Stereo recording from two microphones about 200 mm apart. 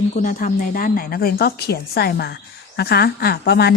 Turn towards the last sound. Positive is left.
turn(degrees=55)  # may be behind; listen again after turning